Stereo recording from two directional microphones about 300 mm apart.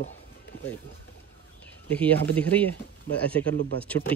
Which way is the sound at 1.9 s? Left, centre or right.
Centre.